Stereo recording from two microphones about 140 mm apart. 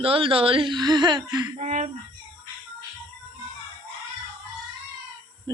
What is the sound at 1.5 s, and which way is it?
Speech, 55° right (ahead or behind).